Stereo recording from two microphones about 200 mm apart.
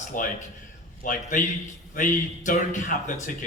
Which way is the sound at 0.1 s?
40° left (ahead or behind).